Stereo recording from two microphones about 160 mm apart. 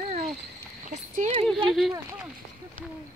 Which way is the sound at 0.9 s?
50° right (ahead or behind).